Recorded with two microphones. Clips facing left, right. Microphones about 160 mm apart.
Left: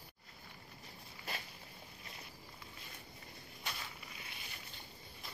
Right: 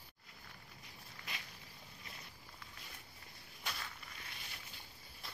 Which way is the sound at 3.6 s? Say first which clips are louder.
Even; 5° left (ahead or behind).